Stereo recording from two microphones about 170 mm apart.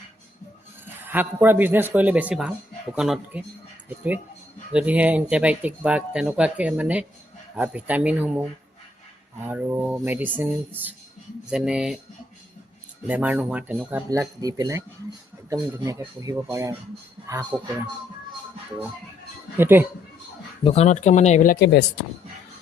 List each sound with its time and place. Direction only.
1.0 s speech: 10° right (ahead or behind)
11.4 s speech: 5° right (ahead or behind)
13.1 s speech: 10° right (ahead or behind)
17.5 s speech: 5° right (ahead or behind)
19.5 s speech: 15° right (ahead or behind)
20.7 s speech: 40° left (ahead or behind)
21.5 s speech: 70° left (ahead or behind)